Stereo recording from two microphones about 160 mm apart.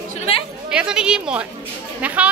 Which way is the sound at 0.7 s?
5° right (ahead or behind).